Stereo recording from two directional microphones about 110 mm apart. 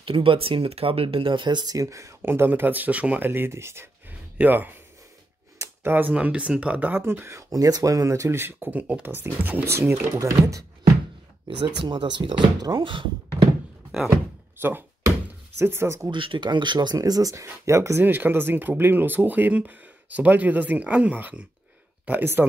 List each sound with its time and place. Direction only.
0.0 s speech: 55° right (ahead or behind); by 10.6 s 30° right (ahead or behind)
11.4 s speech: 50° right (ahead or behind)
14.6 s thunk: 20° right (ahead or behind)
15.6 s speech: 25° right (ahead or behind)
16.1 s speech: 45° right (ahead or behind); by 22.4 s 15° right (ahead or behind)